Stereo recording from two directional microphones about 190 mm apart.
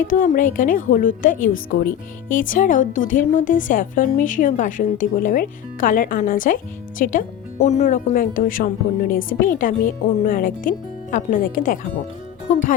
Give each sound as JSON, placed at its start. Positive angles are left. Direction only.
{"t": 0.1, "sound": "speech", "side_deg": 45}